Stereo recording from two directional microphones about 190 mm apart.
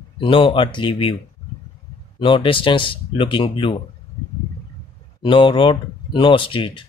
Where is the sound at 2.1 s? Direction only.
25° left (ahead or behind).